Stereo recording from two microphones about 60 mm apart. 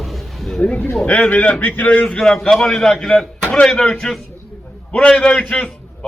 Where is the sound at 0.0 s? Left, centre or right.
Centre.